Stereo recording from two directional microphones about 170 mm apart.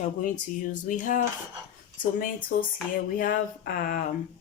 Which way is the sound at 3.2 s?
55° left (ahead or behind).